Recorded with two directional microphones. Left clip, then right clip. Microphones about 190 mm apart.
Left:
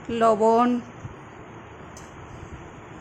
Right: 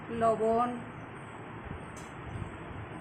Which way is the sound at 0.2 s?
60° left (ahead or behind).